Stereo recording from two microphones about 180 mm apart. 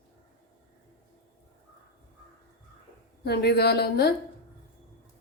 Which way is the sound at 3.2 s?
65° left (ahead or behind).